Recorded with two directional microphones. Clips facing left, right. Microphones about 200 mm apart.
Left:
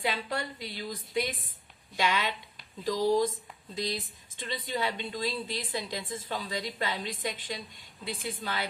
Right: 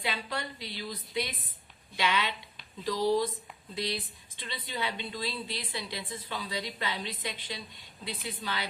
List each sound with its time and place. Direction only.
0.0 s a woman's voice: 45° left (ahead or behind)